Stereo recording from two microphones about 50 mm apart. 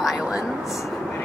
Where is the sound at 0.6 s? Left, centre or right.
Centre.